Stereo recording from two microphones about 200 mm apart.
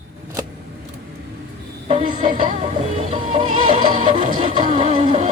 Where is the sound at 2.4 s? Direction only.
35° right (ahead or behind).